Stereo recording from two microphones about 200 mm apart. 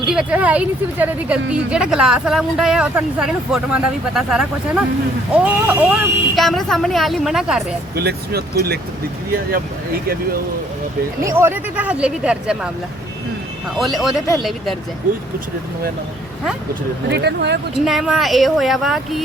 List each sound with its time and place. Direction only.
0.0 s speech: 5° right (ahead or behind)
7.9 s speech: 50° right (ahead or behind)
11.2 s speech: 15° right (ahead or behind)
13.7 s speech: centre (ahead or behind)
17.1 s speech: 55° right (ahead or behind)
17.7 s speech: centre (ahead or behind)